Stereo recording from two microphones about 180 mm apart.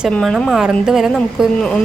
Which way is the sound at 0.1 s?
Centre (ahead or behind).